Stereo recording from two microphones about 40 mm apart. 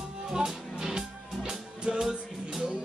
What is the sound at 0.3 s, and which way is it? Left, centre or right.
Music, centre.